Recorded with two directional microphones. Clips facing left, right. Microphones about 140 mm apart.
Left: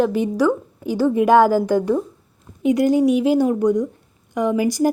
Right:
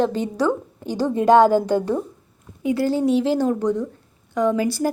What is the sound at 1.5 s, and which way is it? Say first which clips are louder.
Speech: left 1 dB; 20° right (ahead or behind).